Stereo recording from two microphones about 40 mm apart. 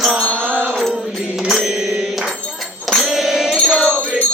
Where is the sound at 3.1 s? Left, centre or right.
Centre.